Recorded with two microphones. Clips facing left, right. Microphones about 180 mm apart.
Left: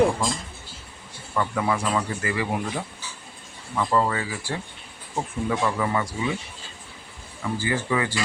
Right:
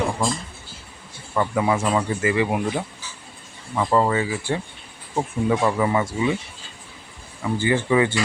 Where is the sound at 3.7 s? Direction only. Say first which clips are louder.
Right 3 dB; 20° right (ahead or behind).